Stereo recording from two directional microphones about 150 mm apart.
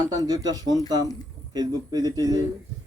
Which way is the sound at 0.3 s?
25° right (ahead or behind).